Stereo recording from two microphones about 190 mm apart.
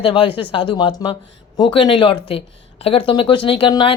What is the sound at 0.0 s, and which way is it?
A woman's voice, 30° left (ahead or behind).